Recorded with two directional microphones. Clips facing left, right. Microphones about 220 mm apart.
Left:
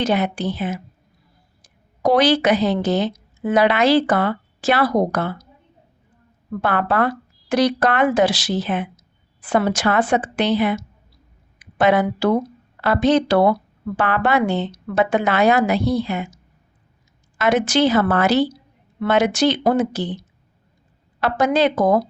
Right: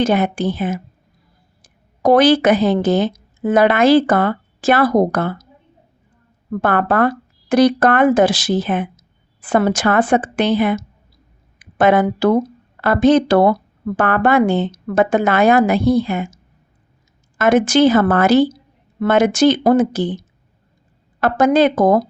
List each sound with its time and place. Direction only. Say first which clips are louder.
0.0 s a woman's voice: right 4 dB; 50° right (ahead or behind)
6.6 s speech: right 4 dB; 50° right (ahead or behind)
17.3 s speech: right 5 dB; 50° right (ahead or behind)